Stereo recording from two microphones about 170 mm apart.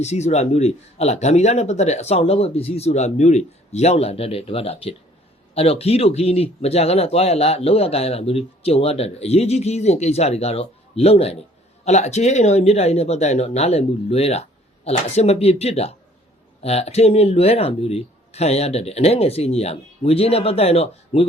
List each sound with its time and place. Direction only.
0.0 s speech: 40° left (ahead or behind)